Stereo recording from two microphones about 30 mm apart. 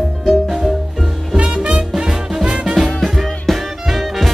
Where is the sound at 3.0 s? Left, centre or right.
Centre.